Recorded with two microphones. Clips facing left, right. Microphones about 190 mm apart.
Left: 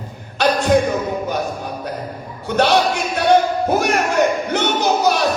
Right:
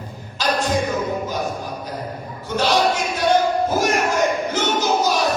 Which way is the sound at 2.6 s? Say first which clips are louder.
Left 3 dB; 65° left (ahead or behind).